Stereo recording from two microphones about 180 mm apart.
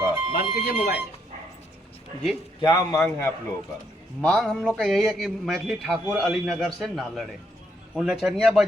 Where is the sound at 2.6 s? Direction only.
25° left (ahead or behind).